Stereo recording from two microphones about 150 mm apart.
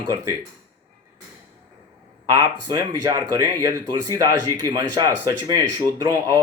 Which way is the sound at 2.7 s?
25° right (ahead or behind).